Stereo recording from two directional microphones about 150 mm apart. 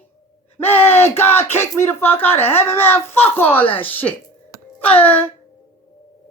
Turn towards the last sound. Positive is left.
turn(degrees=10)  # may be behind; listen again after turning